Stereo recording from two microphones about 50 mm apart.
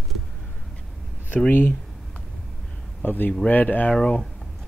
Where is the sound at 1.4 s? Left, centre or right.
Left.